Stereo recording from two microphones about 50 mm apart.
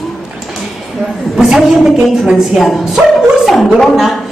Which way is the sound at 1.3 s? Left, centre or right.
Centre.